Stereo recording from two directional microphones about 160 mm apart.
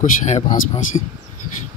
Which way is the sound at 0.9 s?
30° left (ahead or behind).